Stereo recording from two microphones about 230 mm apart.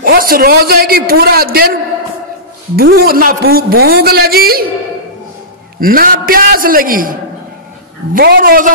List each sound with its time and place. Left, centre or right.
0.0 s speech: right
5.8 s speech: right